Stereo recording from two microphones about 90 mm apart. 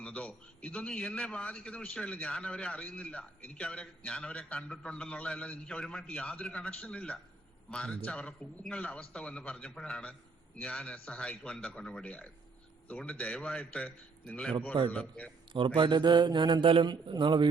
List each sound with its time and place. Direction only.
0.0 s a man's voice: 15° left (ahead or behind)
15.5 s speech: 65° right (ahead or behind)